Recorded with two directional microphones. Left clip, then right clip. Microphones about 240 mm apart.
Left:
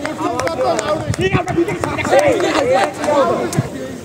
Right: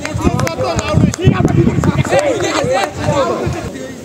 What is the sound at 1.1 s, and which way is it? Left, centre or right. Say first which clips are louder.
Speech: right 2 dB; centre.